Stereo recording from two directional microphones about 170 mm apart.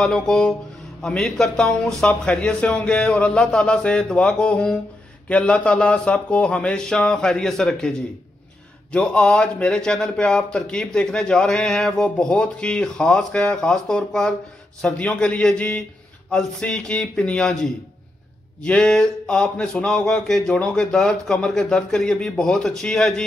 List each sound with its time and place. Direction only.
0.0 s speech: 5° left (ahead or behind)
8.9 s a man's voice: 5° left (ahead or behind)